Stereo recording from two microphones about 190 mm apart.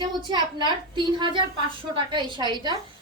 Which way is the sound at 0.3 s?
25° right (ahead or behind).